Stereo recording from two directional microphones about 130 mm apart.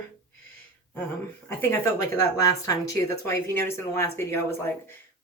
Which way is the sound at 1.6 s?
20° left (ahead or behind).